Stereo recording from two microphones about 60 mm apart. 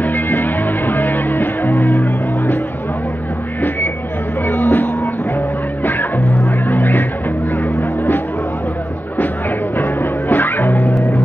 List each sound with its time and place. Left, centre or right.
0.0 s music: left
4.5 s music: left
9.8 s music: left